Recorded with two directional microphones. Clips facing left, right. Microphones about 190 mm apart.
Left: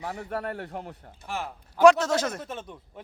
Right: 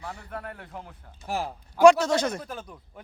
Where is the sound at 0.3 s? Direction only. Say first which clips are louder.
Left 7 dB; 70° left (ahead or behind).